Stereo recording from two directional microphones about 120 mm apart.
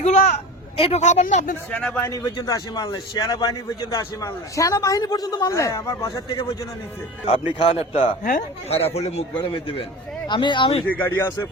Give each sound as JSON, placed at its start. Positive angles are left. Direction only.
{"t": 0.0, "sound": "a sound", "side_deg": 70}
{"t": 0.8, "sound": "speech", "side_deg": 65}
{"t": 1.7, "sound": "speech", "side_deg": 10}
{"t": 2.0, "sound": "a man's voice", "side_deg": 25}
{"t": 7.6, "sound": "a man's voice", "side_deg": 50}
{"t": 8.2, "sound": "speech", "side_deg": 90}
{"t": 8.8, "sound": "speech", "side_deg": 60}
{"t": 9.4, "sound": "a man's voice", "side_deg": 45}
{"t": 10.8, "sound": "speech", "side_deg": 15}